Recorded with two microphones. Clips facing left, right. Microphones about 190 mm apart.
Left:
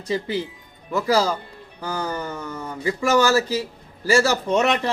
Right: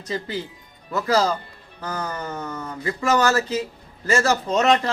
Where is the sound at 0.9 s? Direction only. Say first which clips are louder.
Left 1 dB; 10° left (ahead or behind).